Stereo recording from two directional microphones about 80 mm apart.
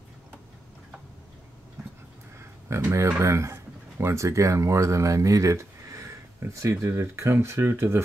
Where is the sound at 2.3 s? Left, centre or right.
Right.